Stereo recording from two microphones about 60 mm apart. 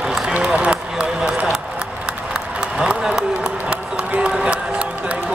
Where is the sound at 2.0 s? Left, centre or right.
Centre.